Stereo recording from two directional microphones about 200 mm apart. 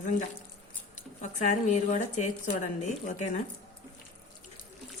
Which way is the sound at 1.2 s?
35° left (ahead or behind).